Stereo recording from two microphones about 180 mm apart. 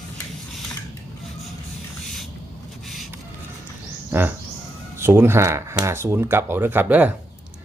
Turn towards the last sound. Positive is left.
turn(degrees=-10)  # may be behind; listen again after turning